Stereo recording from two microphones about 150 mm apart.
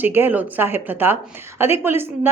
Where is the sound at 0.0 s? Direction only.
15° right (ahead or behind).